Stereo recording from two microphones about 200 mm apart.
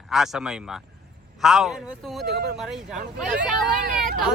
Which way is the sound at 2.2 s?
55° right (ahead or behind).